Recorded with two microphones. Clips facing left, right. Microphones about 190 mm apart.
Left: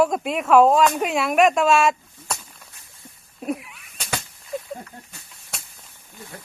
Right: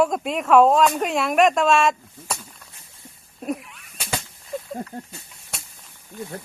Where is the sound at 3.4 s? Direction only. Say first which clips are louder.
Left 1 dB; centre (ahead or behind).